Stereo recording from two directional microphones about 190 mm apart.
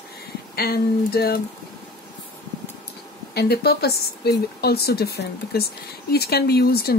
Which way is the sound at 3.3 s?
55° left (ahead or behind).